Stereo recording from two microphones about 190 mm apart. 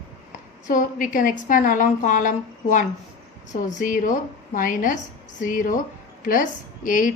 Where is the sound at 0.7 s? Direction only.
45° left (ahead or behind).